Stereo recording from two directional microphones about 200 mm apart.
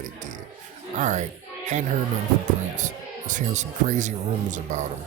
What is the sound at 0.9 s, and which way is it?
Speech, 35° right (ahead or behind).